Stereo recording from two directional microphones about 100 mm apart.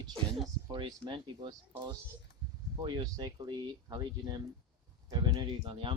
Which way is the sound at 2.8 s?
45° right (ahead or behind).